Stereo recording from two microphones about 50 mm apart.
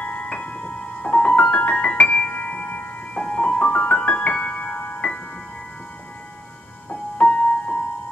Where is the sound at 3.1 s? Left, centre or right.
Left.